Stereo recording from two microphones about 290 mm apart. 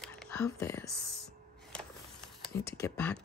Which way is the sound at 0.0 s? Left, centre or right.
Centre.